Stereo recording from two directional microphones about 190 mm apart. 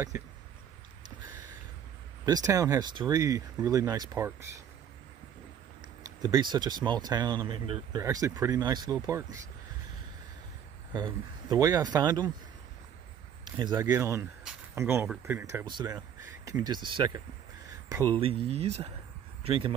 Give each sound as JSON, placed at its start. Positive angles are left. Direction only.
{"t": 2.2, "sound": "speech", "side_deg": -20}
{"t": 6.0, "sound": "speech", "side_deg": -20}
{"t": 10.9, "sound": "speech", "side_deg": -20}
{"t": 13.6, "sound": "speech", "side_deg": -20}